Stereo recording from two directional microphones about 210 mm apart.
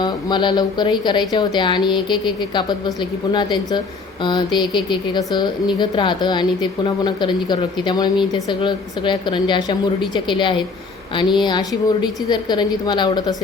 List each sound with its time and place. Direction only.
0.0 s a woman's voice: 20° left (ahead or behind)